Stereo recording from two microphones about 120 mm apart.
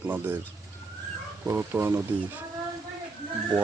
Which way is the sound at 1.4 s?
20° right (ahead or behind).